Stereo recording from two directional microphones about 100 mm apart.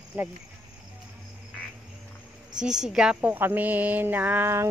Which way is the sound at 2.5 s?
5° right (ahead or behind).